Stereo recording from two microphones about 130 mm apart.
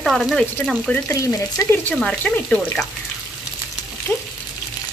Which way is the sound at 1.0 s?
25° left (ahead or behind).